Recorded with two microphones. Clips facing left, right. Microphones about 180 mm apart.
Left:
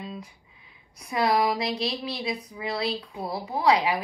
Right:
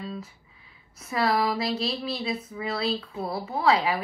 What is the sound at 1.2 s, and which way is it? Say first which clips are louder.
Speech: left 1 dB; 15° left (ahead or behind).